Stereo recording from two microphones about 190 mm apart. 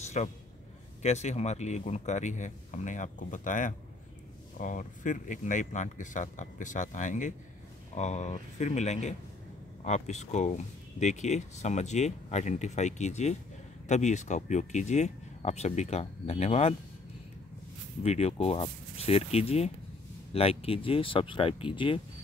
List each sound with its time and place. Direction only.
0.2 s speech: 35° left (ahead or behind)
18.0 s speech: 35° left (ahead or behind)